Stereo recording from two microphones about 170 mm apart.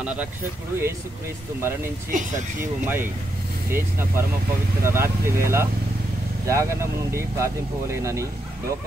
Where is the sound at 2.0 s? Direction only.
50° right (ahead or behind).